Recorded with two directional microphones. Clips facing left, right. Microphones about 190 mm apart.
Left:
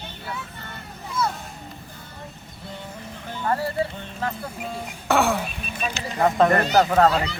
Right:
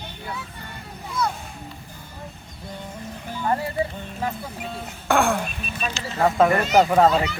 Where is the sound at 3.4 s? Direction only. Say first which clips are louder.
Even; 20° right (ahead or behind).